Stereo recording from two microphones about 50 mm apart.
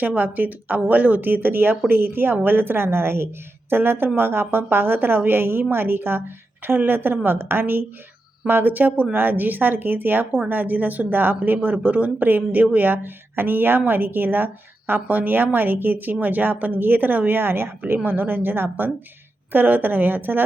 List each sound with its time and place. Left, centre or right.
0.0 s a woman's voice: right